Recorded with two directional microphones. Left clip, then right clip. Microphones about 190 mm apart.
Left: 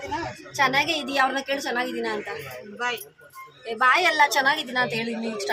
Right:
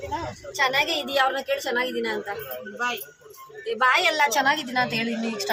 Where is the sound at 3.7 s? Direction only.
30° left (ahead or behind).